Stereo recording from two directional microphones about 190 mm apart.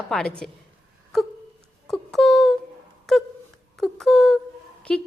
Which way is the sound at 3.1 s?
Centre (ahead or behind).